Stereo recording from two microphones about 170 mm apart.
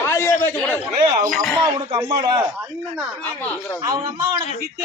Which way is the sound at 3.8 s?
25° right (ahead or behind).